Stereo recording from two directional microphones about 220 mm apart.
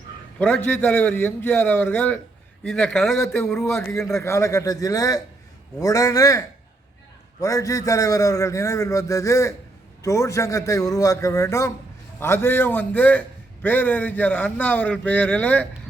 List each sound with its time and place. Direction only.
0.3 s a man's voice: 5° left (ahead or behind)
7.4 s a man's voice: 15° left (ahead or behind)